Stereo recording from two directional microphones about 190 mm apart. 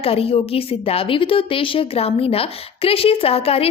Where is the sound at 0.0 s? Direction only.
30° left (ahead or behind).